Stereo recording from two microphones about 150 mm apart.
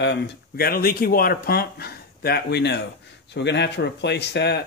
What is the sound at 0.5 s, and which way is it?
Speech, 85° left.